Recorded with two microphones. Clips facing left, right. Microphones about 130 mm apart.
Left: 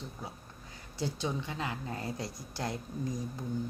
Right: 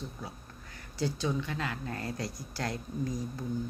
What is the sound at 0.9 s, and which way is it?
Speech, 20° left (ahead or behind).